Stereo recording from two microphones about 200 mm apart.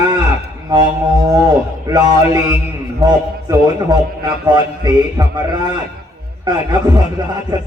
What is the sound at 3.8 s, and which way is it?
A man's voice, 20° right (ahead or behind).